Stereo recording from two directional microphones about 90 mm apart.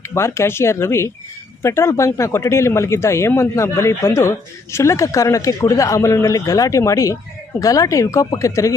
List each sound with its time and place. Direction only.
0.0 s speech: 30° left (ahead or behind)